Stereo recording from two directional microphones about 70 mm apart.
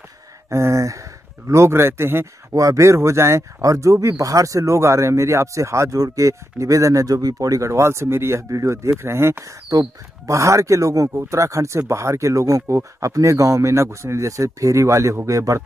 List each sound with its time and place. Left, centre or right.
0.5 s speech: right
2.5 s speech: right
8.5 s speech: right
9.7 s speech: right